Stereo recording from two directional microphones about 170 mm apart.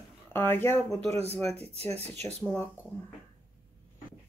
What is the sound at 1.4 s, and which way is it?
Speech, 35° right (ahead or behind).